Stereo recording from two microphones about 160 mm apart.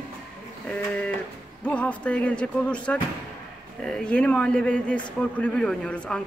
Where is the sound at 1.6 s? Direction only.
10° left (ahead or behind).